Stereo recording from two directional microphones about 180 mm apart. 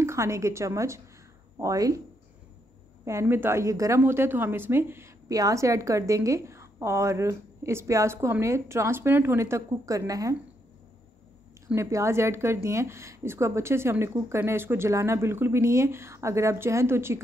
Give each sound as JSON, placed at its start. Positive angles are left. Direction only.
{"t": 0.0, "sound": "a woman's voice", "side_deg": -15}
{"t": 3.1, "sound": "a woman's voice", "side_deg": -15}
{"t": 11.6, "sound": "a woman's voice", "side_deg": -15}